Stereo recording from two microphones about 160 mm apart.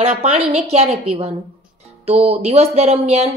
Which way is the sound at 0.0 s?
40° right (ahead or behind).